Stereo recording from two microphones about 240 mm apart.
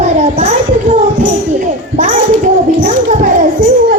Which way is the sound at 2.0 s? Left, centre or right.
Right.